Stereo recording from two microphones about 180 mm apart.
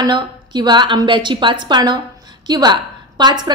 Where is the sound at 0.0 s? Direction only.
25° right (ahead or behind).